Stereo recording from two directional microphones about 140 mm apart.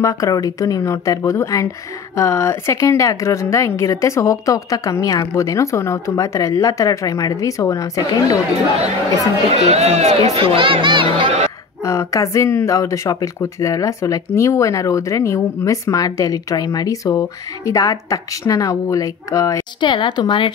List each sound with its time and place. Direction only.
0.0 s speech: 25° left (ahead or behind)
9.5 s speech: 50° right (ahead or behind)
11.8 s speech: 20° left (ahead or behind)